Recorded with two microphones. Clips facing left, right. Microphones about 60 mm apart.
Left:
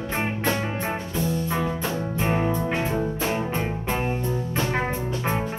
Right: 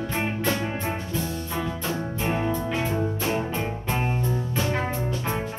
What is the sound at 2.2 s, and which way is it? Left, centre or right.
Music, centre.